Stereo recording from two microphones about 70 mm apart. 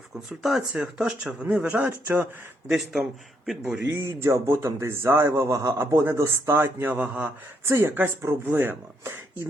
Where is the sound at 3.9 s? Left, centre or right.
Right.